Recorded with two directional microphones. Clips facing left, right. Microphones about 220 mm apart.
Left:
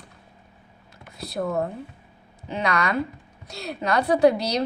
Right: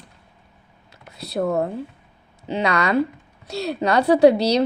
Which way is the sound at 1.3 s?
25° right (ahead or behind).